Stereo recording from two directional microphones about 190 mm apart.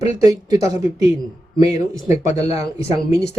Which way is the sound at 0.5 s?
20° right (ahead or behind).